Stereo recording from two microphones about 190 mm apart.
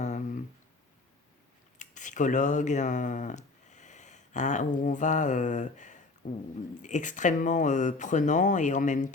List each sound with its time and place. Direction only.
1.8 s speech: 40° left (ahead or behind)
6.2 s a sound: 45° left (ahead or behind)
6.8 s speech: 40° left (ahead or behind)